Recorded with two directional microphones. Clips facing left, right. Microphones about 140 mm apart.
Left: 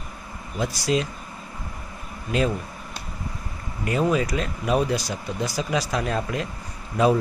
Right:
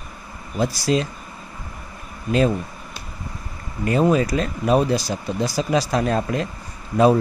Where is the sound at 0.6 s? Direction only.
35° right (ahead or behind).